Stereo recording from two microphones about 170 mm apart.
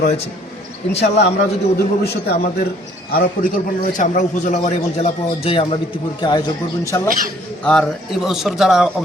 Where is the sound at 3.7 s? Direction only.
50° left (ahead or behind); by 5.8 s 35° left (ahead or behind).